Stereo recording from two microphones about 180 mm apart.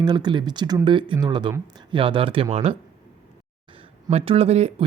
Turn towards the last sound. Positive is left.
turn(degrees=-35)  # may be behind; listen again after turning